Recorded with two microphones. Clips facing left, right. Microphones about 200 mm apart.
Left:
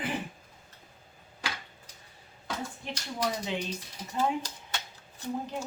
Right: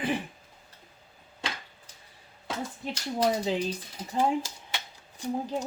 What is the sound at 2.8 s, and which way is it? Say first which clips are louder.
Speech: right 7 dB; 30° right (ahead or behind).